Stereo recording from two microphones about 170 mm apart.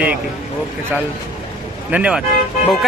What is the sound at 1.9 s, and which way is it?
Speech, 5° right (ahead or behind).